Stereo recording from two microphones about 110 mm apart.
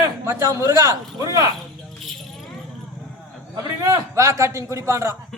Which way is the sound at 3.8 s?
30° right (ahead or behind).